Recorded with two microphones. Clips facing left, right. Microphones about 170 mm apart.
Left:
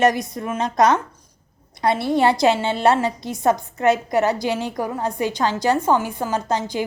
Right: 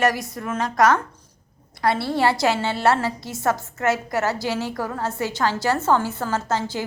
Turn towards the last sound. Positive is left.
turn(degrees=15)  # may be behind; listen again after turning